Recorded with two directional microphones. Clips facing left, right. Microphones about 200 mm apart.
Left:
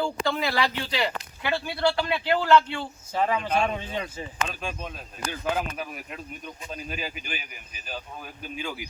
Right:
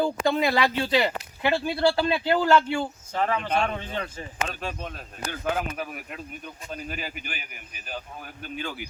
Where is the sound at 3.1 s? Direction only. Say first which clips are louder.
Left 1 dB; 15° left (ahead or behind).